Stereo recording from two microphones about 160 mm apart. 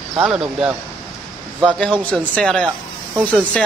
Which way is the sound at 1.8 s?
5° left (ahead or behind).